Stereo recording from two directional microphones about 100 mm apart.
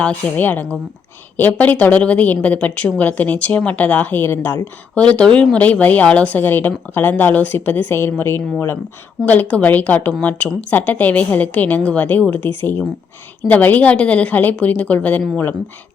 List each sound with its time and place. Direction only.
0.0 s a woman's voice: 15° left (ahead or behind)
9.2 s a woman's voice: 15° left (ahead or behind)